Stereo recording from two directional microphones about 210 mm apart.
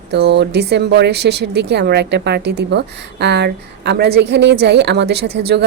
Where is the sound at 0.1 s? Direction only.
55° right (ahead or behind).